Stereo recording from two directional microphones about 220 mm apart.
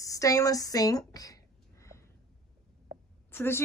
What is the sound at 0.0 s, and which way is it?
A woman's voice, 15° left (ahead or behind).